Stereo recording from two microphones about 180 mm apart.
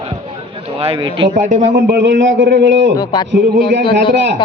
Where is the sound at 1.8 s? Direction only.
70° right (ahead or behind).